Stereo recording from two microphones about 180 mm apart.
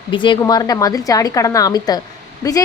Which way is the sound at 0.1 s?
25° left (ahead or behind).